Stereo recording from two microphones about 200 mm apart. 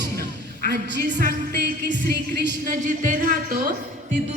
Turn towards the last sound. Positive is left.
turn(degrees=-45)  # may be behind; listen again after turning